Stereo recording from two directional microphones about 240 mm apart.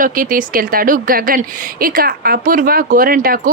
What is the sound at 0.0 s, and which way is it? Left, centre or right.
Speech, right.